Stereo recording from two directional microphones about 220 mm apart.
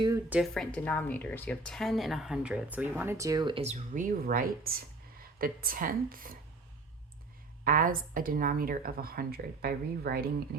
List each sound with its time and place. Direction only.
0.3 s a woman's voice: centre (ahead or behind); by 6.3 s 40° right (ahead or behind)
7.6 s a woman's voice: 40° right (ahead or behind)